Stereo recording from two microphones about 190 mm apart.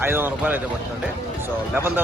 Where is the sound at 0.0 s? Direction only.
10° right (ahead or behind).